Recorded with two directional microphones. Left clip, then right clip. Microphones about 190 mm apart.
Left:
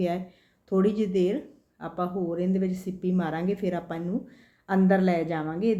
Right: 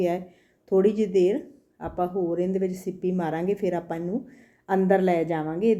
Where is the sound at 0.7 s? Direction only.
10° right (ahead or behind).